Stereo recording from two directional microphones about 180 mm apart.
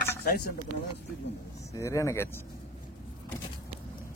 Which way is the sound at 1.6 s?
15° left (ahead or behind).